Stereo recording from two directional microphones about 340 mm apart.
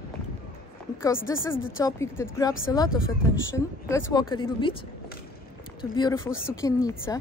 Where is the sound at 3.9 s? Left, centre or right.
Centre.